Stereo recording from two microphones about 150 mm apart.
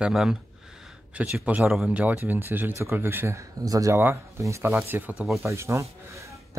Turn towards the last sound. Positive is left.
turn(degrees=-20)  # may be behind; listen again after turning